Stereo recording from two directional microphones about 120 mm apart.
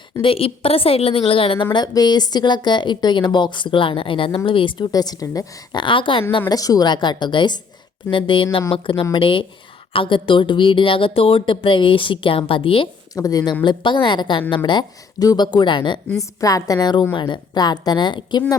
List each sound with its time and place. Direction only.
0.2 s speech: 50° left (ahead or behind)
1.7 s speech: 35° left (ahead or behind)
4.9 s speech: 35° left (ahead or behind)
5.8 s speech: 45° left (ahead or behind)
6.5 s speech: 30° left (ahead or behind); by 12.9 s 45° left (ahead or behind)
13.1 s speech: 30° left (ahead or behind)
16.4 s speech: 30° left (ahead or behind)